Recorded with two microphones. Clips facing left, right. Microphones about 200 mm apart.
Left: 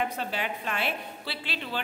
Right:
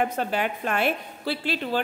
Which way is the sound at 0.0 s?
50° right (ahead or behind).